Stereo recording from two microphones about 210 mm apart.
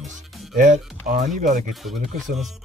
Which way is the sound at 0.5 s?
35° right (ahead or behind).